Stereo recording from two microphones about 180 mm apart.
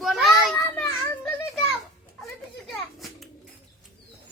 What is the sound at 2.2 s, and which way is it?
Children playing, centre (ahead or behind).